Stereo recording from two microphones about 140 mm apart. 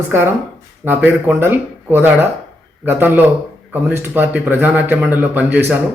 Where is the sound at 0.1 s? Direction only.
15° right (ahead or behind).